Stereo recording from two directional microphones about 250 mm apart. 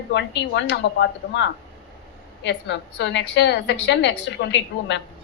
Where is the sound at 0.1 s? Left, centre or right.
Left.